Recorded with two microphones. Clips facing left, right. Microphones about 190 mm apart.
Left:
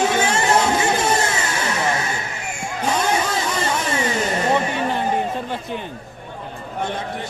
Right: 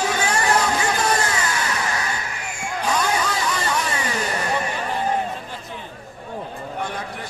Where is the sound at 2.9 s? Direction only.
25° left (ahead or behind).